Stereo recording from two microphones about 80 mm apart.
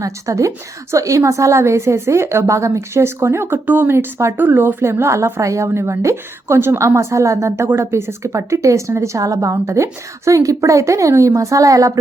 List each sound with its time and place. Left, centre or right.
0.0 s a woman's voice: right